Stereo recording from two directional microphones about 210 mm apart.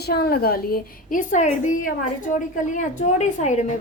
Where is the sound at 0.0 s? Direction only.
50° left (ahead or behind).